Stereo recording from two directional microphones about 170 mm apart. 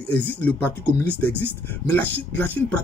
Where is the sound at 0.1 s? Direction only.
10° left (ahead or behind).